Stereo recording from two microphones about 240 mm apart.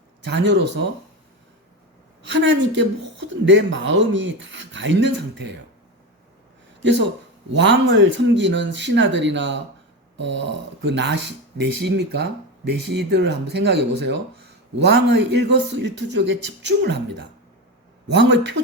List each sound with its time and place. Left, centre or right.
0.2 s speech: right
2.2 s speech: right
6.8 s speech: right